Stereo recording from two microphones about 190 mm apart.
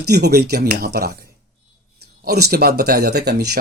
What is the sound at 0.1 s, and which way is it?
Speech, 55° right (ahead or behind).